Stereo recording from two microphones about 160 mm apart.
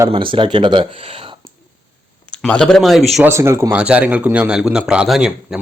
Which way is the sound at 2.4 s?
5° left (ahead or behind).